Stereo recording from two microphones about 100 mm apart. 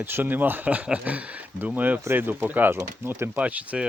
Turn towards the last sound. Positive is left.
turn(degrees=-15)  # may be behind; listen again after turning